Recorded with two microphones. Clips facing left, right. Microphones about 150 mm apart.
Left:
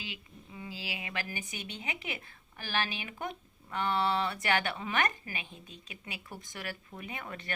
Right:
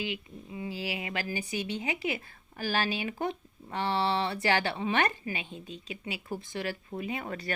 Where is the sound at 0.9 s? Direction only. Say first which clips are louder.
Right 3 dB; 30° right (ahead or behind).